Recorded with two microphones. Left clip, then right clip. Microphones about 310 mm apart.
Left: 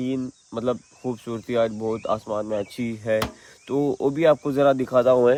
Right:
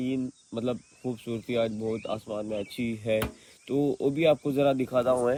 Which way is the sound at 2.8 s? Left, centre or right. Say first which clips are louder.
Left 2 dB; left.